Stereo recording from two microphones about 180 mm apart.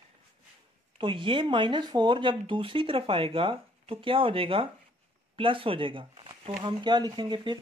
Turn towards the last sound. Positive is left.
turn(degrees=-25)  # may be behind; listen again after turning